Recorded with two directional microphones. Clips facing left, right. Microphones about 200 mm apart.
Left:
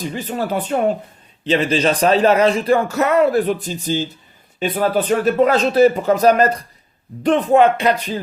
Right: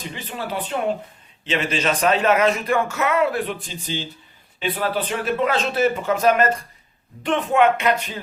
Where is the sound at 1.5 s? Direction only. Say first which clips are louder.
Left 6 dB; 35° left (ahead or behind).